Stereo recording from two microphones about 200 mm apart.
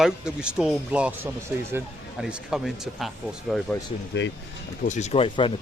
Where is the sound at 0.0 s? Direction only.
5° right (ahead or behind).